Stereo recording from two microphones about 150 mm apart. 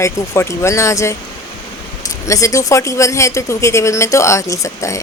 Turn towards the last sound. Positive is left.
turn(degrees=20)  # may be behind; listen again after turning